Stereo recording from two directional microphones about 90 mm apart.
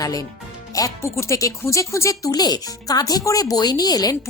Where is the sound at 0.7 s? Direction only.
35° left (ahead or behind).